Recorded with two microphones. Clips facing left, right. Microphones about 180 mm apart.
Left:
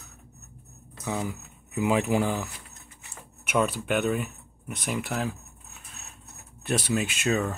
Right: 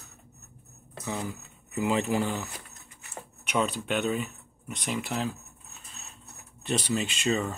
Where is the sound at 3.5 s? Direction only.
5° left (ahead or behind).